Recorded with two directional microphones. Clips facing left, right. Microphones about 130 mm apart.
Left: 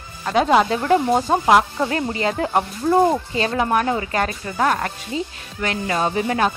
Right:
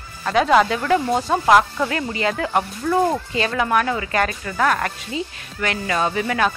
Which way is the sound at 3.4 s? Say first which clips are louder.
Right 1 dB; 30° left (ahead or behind).